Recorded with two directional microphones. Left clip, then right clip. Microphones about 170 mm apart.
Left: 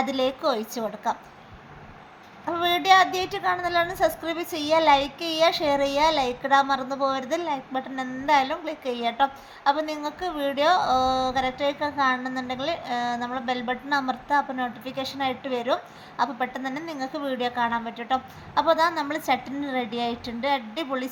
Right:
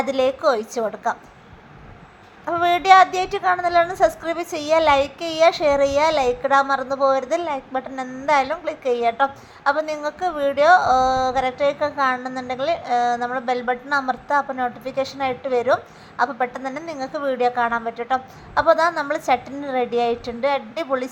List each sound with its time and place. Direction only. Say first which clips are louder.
0.0 s a woman's voice: right 6 dB; 20° right (ahead or behind)
2.5 s a woman's voice: right 5 dB; 20° right (ahead or behind)
8.0 s a woman's voice: right 1 dB; 10° left (ahead or behind)
8.3 s a woman's voice: right 3 dB; 20° right (ahead or behind)